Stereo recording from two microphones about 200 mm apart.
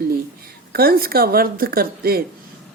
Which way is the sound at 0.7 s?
50° right (ahead or behind).